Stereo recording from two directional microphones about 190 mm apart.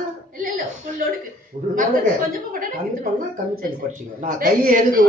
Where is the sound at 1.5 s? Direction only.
35° right (ahead or behind).